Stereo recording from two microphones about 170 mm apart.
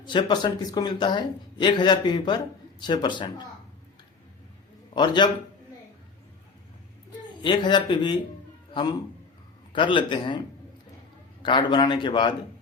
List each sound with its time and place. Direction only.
0.0 s a man's voice: 25° left (ahead or behind)
4.9 s a man's voice: 25° left (ahead or behind)
7.4 s a man's voice: 25° left (ahead or behind)
11.4 s a man's voice: 30° left (ahead or behind)